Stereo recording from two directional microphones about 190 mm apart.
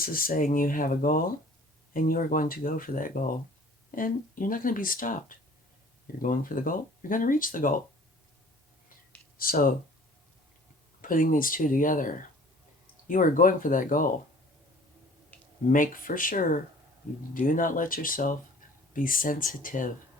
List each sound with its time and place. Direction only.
0.0 s speech: 50° left (ahead or behind)
9.4 s speech: 50° left (ahead or behind)
11.0 s speech: 45° left (ahead or behind)
15.3 s a sound: 10° left (ahead or behind)
15.7 s speech: 45° left (ahead or behind)